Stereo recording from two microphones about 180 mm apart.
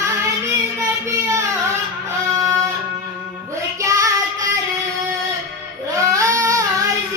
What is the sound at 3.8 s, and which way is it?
Child singing, 15° right (ahead or behind).